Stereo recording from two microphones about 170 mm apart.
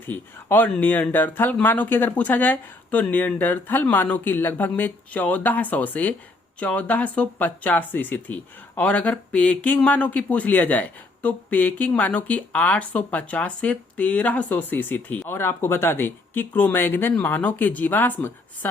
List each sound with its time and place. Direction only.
0.1 s speech: 10° left (ahead or behind)